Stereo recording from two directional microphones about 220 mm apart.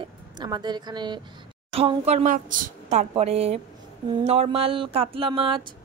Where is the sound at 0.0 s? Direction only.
20° right (ahead or behind).